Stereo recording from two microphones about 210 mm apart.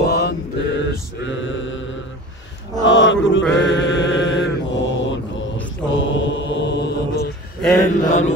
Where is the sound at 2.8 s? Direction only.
60° left (ahead or behind).